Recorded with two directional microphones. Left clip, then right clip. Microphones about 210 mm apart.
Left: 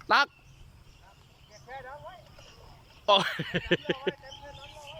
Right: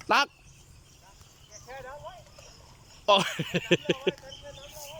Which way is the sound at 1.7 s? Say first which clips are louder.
Right 1 dB; 5° right (ahead or behind).